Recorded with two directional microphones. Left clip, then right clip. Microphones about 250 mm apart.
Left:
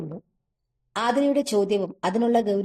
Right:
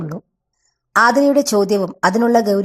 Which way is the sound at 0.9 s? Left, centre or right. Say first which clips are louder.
Right 10 dB; centre.